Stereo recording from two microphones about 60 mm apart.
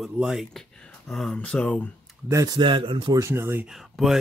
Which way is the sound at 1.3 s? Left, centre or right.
Centre.